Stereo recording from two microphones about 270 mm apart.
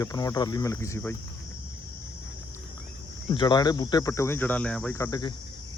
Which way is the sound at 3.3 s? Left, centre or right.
Centre.